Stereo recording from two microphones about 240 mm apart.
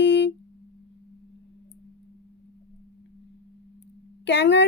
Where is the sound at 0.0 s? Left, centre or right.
Left.